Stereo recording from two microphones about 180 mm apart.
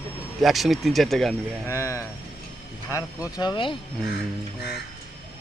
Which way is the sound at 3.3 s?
25° left (ahead or behind).